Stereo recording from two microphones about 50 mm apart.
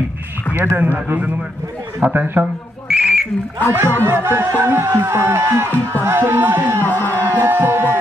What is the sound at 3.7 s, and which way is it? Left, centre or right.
Music, right.